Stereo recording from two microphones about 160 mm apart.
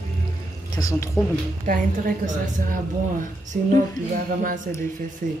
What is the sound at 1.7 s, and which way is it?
Speech, 60° right (ahead or behind).